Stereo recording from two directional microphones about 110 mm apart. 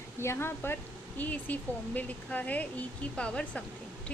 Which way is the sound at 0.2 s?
20° left (ahead or behind).